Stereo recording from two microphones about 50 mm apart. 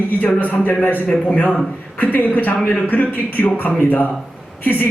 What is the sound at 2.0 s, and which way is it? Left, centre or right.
A man's voice, left.